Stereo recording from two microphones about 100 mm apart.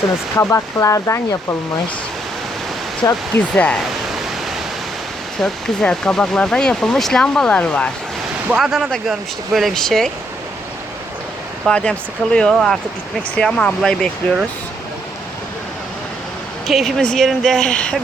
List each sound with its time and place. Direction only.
0.3 s speech: 30° left (ahead or behind)
3.0 s speech: 25° left (ahead or behind)
3.5 s speech: 10° left (ahead or behind)
5.4 s speech: 5° left (ahead or behind)
8.5 s speech: 5° right (ahead or behind)
11.7 s speech: 10° left (ahead or behind)
16.6 s speech: centre (ahead or behind)